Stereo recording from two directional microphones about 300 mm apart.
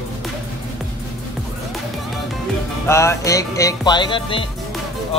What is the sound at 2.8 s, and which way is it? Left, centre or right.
Music, centre.